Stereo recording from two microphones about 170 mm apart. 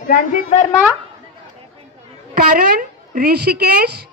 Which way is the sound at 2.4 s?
55° right (ahead or behind).